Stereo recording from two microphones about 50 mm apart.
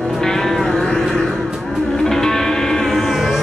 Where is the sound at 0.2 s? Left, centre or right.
Centre.